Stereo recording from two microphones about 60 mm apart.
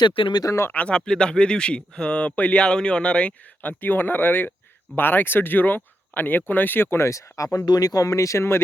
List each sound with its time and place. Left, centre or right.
0.7 s speech: centre; by 7.1 s left
7.1 s speech: left